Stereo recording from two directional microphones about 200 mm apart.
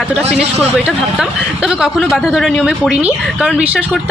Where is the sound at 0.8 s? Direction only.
Centre (ahead or behind).